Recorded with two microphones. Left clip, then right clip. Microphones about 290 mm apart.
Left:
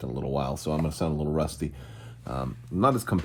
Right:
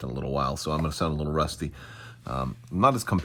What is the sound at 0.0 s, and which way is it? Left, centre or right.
Speech, right.